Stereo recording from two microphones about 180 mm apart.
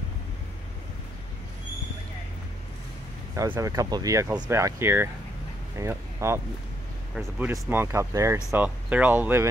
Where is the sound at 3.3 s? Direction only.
15° right (ahead or behind).